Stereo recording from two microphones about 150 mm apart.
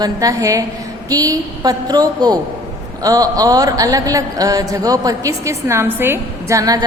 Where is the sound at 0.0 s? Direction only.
25° right (ahead or behind).